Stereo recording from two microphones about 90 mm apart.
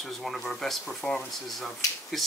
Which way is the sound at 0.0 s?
5° left (ahead or behind).